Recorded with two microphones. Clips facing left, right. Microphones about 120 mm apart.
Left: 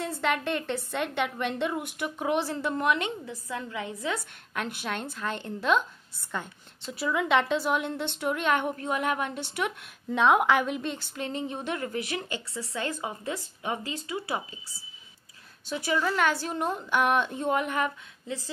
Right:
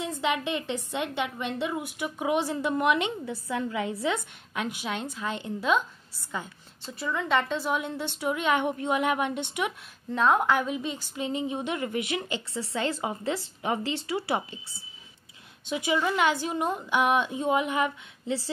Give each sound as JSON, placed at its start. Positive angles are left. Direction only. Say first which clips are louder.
{"t": 0.1, "sound": "a woman's voice", "louder": "right 1 dB", "side_deg": -10}
{"t": 4.6, "sound": "a woman's voice", "louder": "right 1 dB", "side_deg": -10}
{"t": 6.9, "sound": "a woman's voice", "louder": "left 2 dB", "side_deg": 5}
{"t": 10.1, "sound": "a woman's voice", "louder": "left 1 dB", "side_deg": 0}
{"t": 15.7, "sound": "a woman's voice", "louder": "right 1 dB", "side_deg": -15}
{"t": 18.2, "sound": "speech", "louder": "right 5 dB", "side_deg": -30}